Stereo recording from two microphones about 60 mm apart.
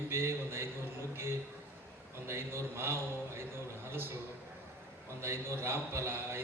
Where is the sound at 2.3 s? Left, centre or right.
Right.